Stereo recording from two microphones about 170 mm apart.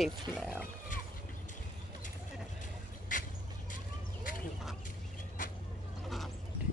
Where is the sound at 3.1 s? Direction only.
50° left (ahead or behind).